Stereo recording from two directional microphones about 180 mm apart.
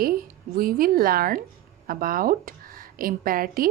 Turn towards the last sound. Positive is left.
turn(degrees=-50)  # may be behind; listen again after turning